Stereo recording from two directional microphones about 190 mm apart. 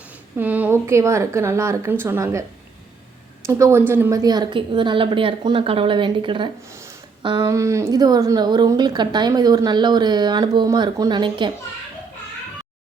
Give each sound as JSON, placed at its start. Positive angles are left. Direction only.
{"t": 0.3, "sound": "a woman's voice", "side_deg": -10}
{"t": 3.4, "sound": "a woman's voice", "side_deg": -15}
{"t": 7.4, "sound": "a woman's voice", "side_deg": -15}